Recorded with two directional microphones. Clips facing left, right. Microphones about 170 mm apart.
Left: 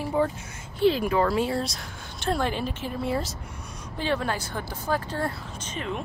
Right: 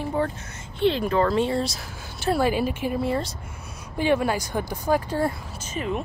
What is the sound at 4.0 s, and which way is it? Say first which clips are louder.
Speech: right 5 dB; 10° right (ahead or behind).